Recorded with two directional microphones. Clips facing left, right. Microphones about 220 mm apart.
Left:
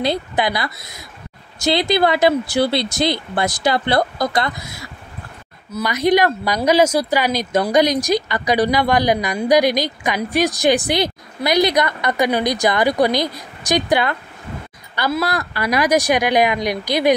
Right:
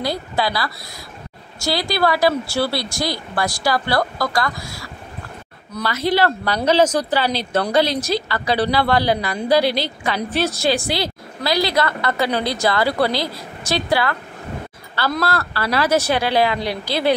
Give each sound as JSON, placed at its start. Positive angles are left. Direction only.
{"t": 0.0, "sound": "speech", "side_deg": 20}
{"t": 5.9, "sound": "speech", "side_deg": 15}